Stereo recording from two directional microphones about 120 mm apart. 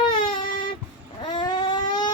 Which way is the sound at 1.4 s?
40° left (ahead or behind).